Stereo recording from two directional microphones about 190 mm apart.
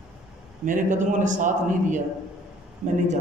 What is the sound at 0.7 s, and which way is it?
A man's voice, 40° right (ahead or behind).